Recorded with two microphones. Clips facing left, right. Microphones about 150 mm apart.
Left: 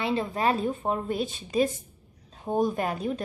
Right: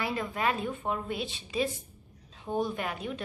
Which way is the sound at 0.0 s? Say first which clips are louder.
Left 4 dB; 30° left (ahead or behind).